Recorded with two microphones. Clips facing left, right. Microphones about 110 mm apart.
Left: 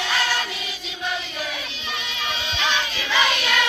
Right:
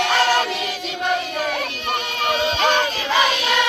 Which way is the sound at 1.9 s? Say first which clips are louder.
Right 7 dB; 50° right (ahead or behind).